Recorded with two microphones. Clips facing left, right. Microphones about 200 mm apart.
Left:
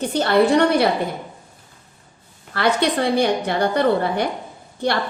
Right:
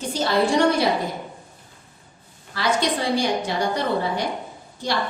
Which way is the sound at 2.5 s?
60° left (ahead or behind).